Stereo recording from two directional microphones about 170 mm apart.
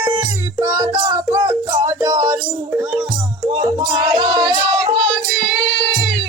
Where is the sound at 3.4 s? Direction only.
30° right (ahead or behind).